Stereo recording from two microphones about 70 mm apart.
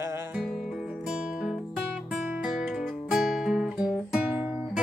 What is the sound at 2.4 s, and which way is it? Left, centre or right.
Music, centre.